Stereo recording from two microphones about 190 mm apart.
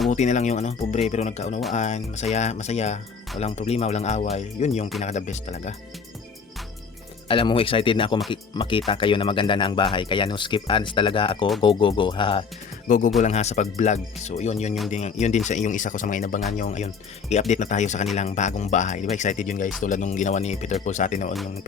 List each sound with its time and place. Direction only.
0.1 s speech: 40° left (ahead or behind)
7.3 s speech: 30° left (ahead or behind)